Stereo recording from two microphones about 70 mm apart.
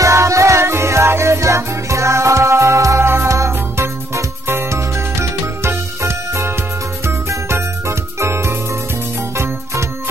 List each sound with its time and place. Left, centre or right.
0.0 s music: right